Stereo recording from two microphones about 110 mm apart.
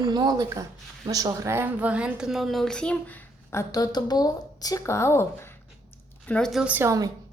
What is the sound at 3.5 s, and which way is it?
A woman's voice, 30° left (ahead or behind).